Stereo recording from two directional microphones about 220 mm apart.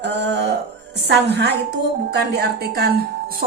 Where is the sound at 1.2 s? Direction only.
50° right (ahead or behind).